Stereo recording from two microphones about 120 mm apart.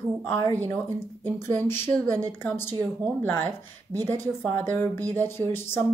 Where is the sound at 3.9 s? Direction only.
30° right (ahead or behind).